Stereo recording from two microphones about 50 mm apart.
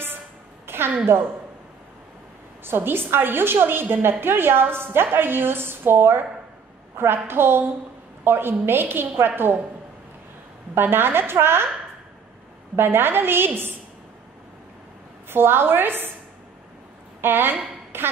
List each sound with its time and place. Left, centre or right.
0.7 s a sound: right
2.6 s a woman's voice: right
10.7 s a woman's voice: right
12.7 s a woman's voice: right
15.2 s a woman's voice: right
17.2 s a woman's voice: right